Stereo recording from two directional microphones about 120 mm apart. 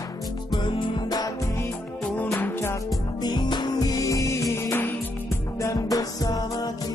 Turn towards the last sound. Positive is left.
turn(degrees=30)  # may be behind; listen again after turning